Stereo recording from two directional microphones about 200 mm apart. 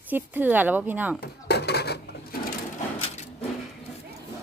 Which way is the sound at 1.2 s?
55° left (ahead or behind).